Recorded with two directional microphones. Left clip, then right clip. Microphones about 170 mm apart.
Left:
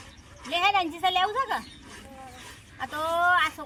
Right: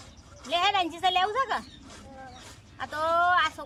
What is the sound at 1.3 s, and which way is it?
Speech, 20° right (ahead or behind).